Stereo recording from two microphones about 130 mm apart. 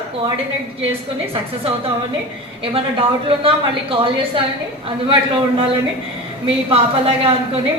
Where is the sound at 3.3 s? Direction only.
45° right (ahead or behind).